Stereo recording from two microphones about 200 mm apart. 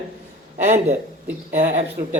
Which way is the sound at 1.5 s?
40° right (ahead or behind).